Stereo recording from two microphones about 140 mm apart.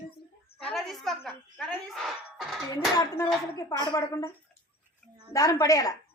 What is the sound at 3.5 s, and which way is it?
Speech, 25° left (ahead or behind).